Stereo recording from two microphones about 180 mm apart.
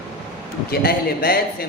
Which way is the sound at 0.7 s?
55° left (ahead or behind).